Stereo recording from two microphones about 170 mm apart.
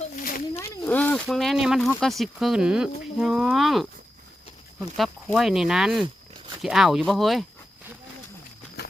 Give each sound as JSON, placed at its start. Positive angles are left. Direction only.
{"t": 0.2, "sound": "snake", "side_deg": 55}
{"t": 0.9, "sound": "speech", "side_deg": 10}
{"t": 4.9, "sound": "speech", "side_deg": 0}